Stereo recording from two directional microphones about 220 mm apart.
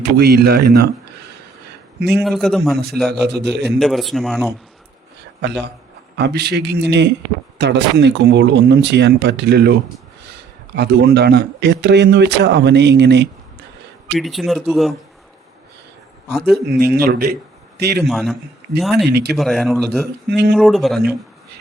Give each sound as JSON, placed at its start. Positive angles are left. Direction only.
{"t": 0.0, "sound": "a man's voice", "side_deg": -45}
{"t": 2.2, "sound": "speech", "side_deg": 0}
{"t": 2.7, "sound": "a man's voice", "side_deg": -45}
{"t": 3.8, "sound": "speech", "side_deg": 0}
{"t": 5.4, "sound": "a man's voice", "side_deg": -50}
{"t": 14.2, "sound": "speech", "side_deg": 0}
{"t": 16.6, "sound": "a man's voice", "side_deg": -45}
{"t": 18.1, "sound": "speech", "side_deg": 0}
{"t": 19.1, "sound": "a man's voice", "side_deg": -45}
{"t": 19.4, "sound": "speech", "side_deg": 0}
{"t": 20.2, "sound": "a man's voice", "side_deg": -50}
{"t": 20.5, "sound": "speech", "side_deg": 0}